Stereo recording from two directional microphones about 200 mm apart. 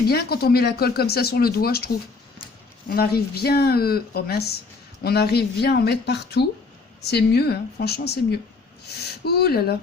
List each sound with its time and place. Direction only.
0.1 s speech: 50° left (ahead or behind)
2.9 s a woman's voice: 50° left (ahead or behind)